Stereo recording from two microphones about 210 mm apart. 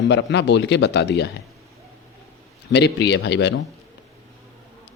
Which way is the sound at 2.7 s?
55° left (ahead or behind).